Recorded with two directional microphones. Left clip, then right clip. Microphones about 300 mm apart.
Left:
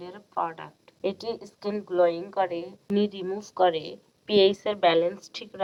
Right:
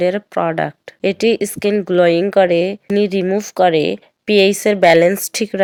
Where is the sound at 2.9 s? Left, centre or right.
Right.